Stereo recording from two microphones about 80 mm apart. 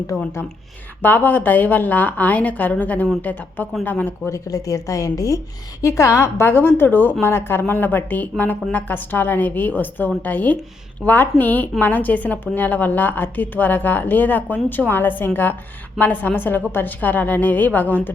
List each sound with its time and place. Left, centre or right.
0.1 s speech: centre
1.0 s a woman's voice: left
4.3 s a woman's voice: left